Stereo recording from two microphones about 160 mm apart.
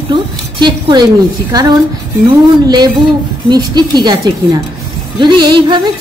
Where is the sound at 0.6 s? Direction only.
30° right (ahead or behind).